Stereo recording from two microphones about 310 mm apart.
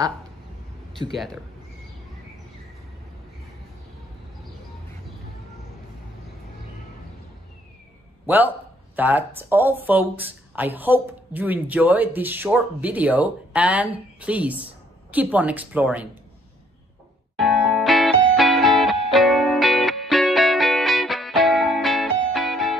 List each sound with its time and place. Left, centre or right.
1.1 s speech: centre
8.9 s speech: centre
17.4 s music: centre